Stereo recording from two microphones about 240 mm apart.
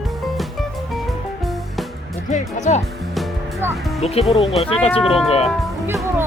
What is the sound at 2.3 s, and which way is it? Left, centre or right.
Speech, left.